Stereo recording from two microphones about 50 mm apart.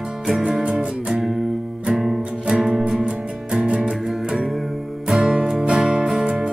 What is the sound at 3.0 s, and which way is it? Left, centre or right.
Music, centre.